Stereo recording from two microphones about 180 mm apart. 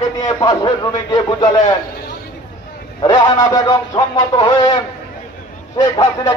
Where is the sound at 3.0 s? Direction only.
25° left (ahead or behind).